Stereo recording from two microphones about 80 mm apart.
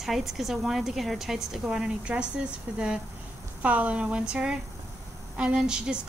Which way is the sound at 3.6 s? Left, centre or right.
Centre.